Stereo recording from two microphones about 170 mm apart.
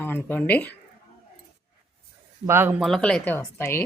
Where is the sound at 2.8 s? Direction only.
5° left (ahead or behind).